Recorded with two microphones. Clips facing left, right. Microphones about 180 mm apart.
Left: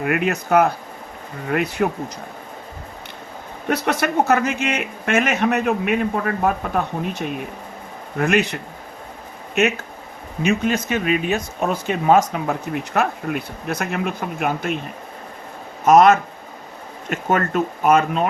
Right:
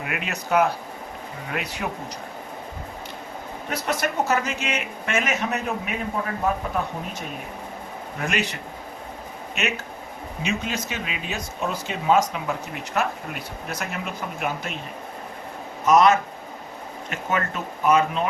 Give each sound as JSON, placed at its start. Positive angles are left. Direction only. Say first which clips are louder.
{"t": 0.0, "sound": "speech", "louder": "left 10 dB", "side_deg": 50}
{"t": 3.7, "sound": "speech", "louder": "left 6 dB", "side_deg": 65}
{"t": 8.2, "sound": "speech", "louder": "left 8 dB", "side_deg": 55}
{"t": 9.6, "sound": "speech", "louder": "left 9 dB", "side_deg": 50}
{"t": 15.9, "sound": "speech", "louder": "left 5 dB", "side_deg": 50}